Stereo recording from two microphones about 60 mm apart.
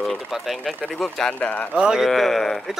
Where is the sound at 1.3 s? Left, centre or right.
Left.